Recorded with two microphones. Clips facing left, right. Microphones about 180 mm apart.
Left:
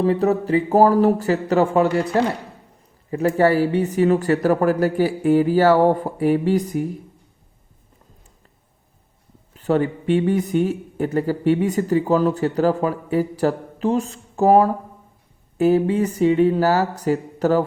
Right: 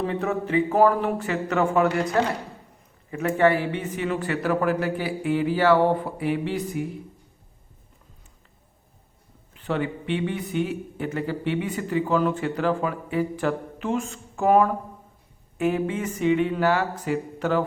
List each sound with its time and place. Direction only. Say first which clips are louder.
0.0 s a man's voice: left 7 dB; 35° left (ahead or behind)
9.6 s a man's voice: left 7 dB; 40° left (ahead or behind)